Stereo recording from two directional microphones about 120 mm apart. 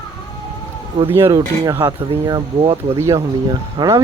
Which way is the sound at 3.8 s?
30° right (ahead or behind).